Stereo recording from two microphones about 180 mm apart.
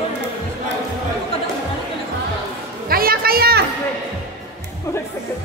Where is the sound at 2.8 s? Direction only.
55° right (ahead or behind).